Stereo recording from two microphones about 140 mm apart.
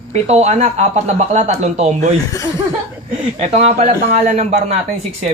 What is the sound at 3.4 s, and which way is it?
Speech, 50° right (ahead or behind).